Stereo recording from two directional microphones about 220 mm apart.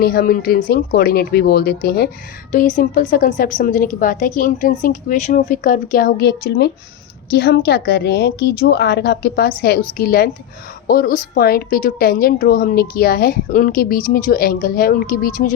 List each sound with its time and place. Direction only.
0.0 s a woman's voice: 45° left (ahead or behind)